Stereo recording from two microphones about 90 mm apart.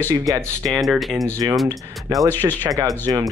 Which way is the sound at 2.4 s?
35° right (ahead or behind).